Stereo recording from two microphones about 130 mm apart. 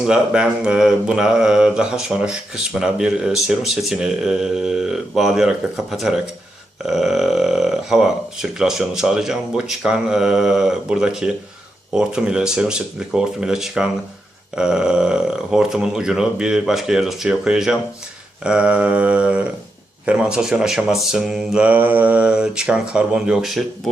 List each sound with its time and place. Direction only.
0.0 s speech: 5° right (ahead or behind)